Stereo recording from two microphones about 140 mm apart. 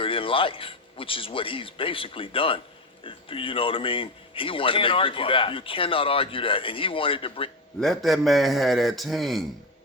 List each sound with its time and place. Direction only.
0.0 s speech: 40° left (ahead or behind)
7.8 s a man's voice: centre (ahead or behind)